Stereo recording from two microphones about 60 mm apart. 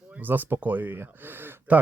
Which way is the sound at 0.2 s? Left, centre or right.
Right.